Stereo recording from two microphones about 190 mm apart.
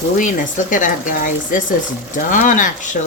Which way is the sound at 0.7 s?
45° left (ahead or behind).